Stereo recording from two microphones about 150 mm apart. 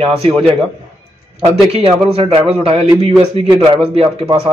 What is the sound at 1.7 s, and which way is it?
Speech, 40° right (ahead or behind).